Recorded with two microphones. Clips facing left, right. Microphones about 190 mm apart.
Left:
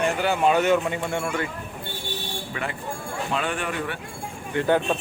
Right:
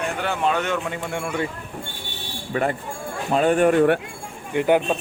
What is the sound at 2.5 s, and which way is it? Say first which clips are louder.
Speech: right 9 dB; 40° right (ahead or behind).